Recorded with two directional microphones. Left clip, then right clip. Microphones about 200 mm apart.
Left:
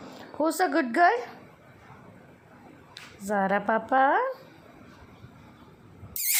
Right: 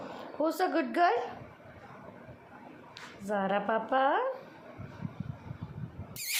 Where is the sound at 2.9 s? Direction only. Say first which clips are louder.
Left 5 dB; 30° left (ahead or behind).